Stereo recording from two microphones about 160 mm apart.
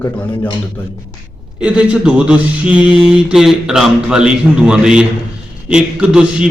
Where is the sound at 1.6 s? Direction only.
5° right (ahead or behind).